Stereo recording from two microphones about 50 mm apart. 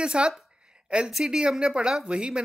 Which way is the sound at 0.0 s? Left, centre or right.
Centre.